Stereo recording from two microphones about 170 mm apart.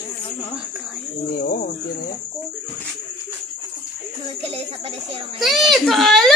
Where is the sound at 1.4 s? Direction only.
55° left (ahead or behind).